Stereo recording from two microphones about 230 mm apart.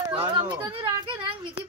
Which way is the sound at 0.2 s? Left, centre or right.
Centre.